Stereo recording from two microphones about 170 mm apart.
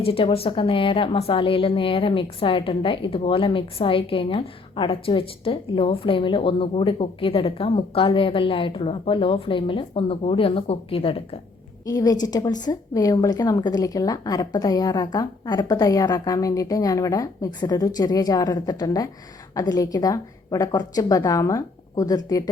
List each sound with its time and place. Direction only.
0.0 s a woman's voice: 35° left (ahead or behind)
11.9 s a woman's voice: 20° left (ahead or behind)